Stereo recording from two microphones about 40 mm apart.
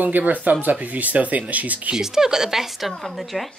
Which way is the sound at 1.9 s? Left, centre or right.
Centre.